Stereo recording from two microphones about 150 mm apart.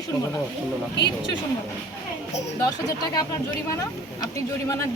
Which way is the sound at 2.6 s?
25° left (ahead or behind).